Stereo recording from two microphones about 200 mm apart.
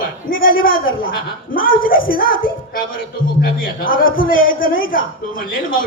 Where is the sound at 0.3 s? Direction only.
45° left (ahead or behind).